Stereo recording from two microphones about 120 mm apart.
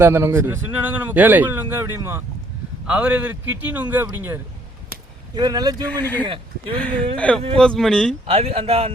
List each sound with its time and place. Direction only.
0.0 s speech: 20° right (ahead or behind)
2.8 s a man's voice: 10° right (ahead or behind)
5.3 s speech: 35° right (ahead or behind)
5.9 s speech: 15° left (ahead or behind)
6.2 s speech: 45° right (ahead or behind)
6.7 s speech: 10° left (ahead or behind)
8.3 s speech: 55° right (ahead or behind)